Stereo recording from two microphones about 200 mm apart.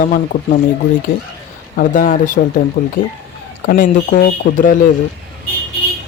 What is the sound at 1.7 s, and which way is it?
Speech, 45° left (ahead or behind).